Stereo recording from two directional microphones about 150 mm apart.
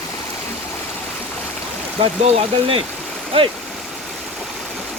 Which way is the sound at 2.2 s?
40° right (ahead or behind).